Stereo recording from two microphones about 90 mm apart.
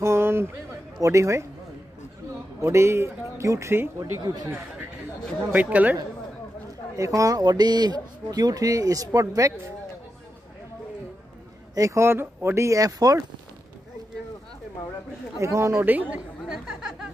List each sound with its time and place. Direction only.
0.0 s a sound: 30° right (ahead or behind)
1.0 s speech: 35° right (ahead or behind)
2.6 s speech: 30° right (ahead or behind)
4.0 s speech: 45° right (ahead or behind)
5.5 s speech: 15° right (ahead or behind)
7.0 s speech: 40° right (ahead or behind)
11.7 s speech: 35° right (ahead or behind)
12.6 s speech: 40° right (ahead or behind)
15.3 s speech: 35° right (ahead or behind)
15.8 s speech: 20° right (ahead or behind)